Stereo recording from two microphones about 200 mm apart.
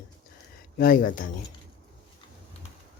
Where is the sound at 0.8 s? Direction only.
45° left (ahead or behind).